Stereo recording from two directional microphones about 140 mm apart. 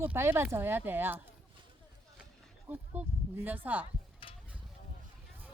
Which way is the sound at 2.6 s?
15° right (ahead or behind).